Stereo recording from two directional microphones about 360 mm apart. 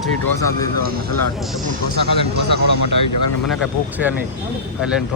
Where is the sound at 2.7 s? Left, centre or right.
Left.